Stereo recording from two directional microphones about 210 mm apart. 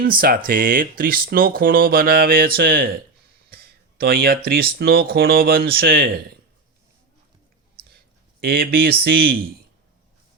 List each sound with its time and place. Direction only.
0.0 s speech: 45° right (ahead or behind)
8.4 s speech: 45° right (ahead or behind)